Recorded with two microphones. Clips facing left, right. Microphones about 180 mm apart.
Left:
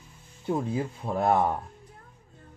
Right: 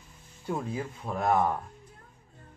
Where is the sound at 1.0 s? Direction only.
30° left (ahead or behind).